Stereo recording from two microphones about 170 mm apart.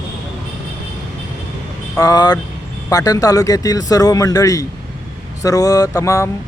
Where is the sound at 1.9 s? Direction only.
20° left (ahead or behind).